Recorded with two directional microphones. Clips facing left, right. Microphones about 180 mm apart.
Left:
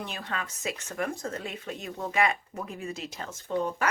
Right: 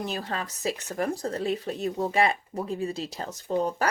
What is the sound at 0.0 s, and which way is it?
Speech, 35° right (ahead or behind).